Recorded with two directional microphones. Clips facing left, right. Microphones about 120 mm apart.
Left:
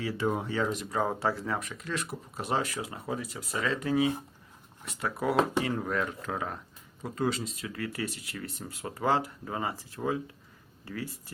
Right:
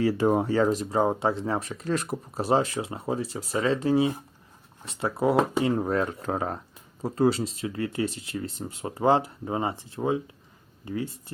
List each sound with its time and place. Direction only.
0.0 s speech: 40° right (ahead or behind); by 11.2 s 25° right (ahead or behind)